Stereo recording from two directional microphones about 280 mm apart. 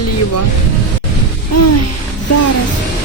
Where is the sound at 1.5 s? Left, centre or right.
Left.